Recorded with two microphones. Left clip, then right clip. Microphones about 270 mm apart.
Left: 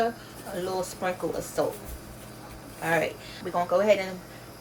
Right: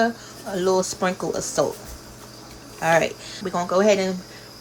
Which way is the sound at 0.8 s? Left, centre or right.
Right.